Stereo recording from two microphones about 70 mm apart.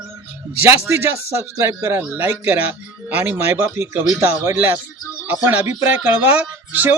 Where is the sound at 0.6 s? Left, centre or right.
Right.